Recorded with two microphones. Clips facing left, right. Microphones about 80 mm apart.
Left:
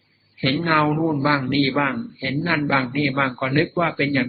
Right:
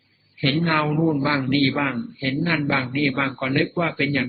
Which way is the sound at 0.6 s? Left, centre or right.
Left.